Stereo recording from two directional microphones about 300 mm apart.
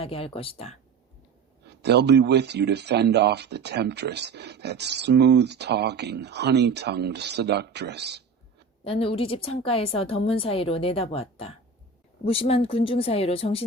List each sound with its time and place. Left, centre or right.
0.0 s a woman's voice: centre
1.6 s speech: right
8.8 s a woman's voice: centre